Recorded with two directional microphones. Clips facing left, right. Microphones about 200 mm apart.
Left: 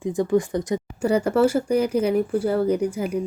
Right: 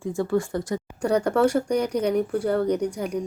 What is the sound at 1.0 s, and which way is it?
Speech, 5° left (ahead or behind).